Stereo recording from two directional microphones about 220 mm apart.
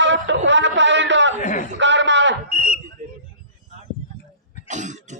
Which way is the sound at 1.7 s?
55° right (ahead or behind).